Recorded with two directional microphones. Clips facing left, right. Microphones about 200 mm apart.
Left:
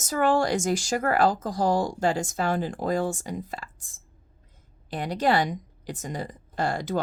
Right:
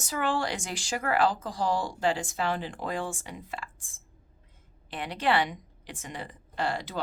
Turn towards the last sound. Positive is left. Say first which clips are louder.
# left 5 dB
turn(degrees=45)  # may be behind; listen again after turning